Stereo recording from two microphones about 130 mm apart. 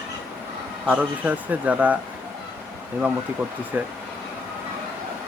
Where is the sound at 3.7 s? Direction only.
15° right (ahead or behind).